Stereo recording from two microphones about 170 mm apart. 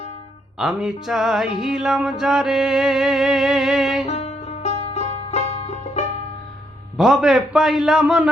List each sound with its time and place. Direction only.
0.6 s music: centre (ahead or behind)
4.0 s music: 40° left (ahead or behind)
6.9 s music: 5° right (ahead or behind)